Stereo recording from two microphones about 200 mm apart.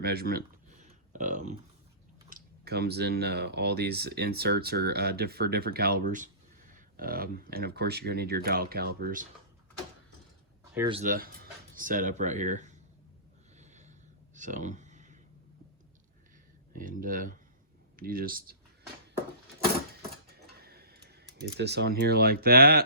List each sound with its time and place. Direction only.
0.0 s speech: 50° right (ahead or behind)
0.7 s a sound: 40° right (ahead or behind)
2.3 s speech: 55° right (ahead or behind)
11.0 s speech: 45° right (ahead or behind)
13.6 s snort: 35° right (ahead or behind)
14.3 s a sound: 40° right (ahead or behind)
16.7 s speech: 40° right (ahead or behind)
20.2 s cutlery: 50° right (ahead or behind)
21.4 s speech: 55° right (ahead or behind)